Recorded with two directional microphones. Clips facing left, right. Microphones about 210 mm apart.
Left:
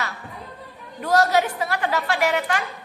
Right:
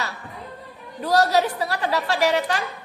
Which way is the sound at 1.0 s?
35° right (ahead or behind).